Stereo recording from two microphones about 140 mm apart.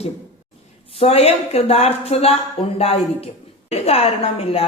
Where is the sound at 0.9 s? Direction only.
45° left (ahead or behind).